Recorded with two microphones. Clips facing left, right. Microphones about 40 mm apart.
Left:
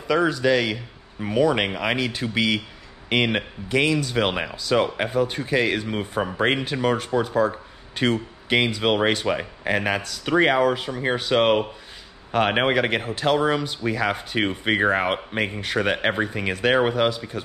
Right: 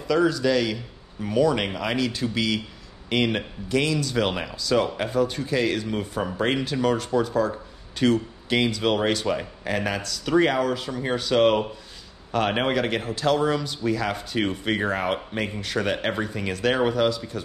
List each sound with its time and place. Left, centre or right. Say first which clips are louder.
0.1 s speech: left 1 dB; left